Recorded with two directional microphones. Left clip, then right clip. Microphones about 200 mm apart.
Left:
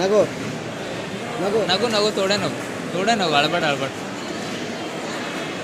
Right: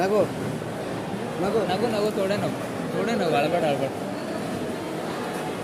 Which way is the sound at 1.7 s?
10° left (ahead or behind).